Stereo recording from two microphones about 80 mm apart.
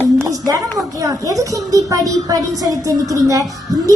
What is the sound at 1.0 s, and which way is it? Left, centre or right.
A woman's voice, right.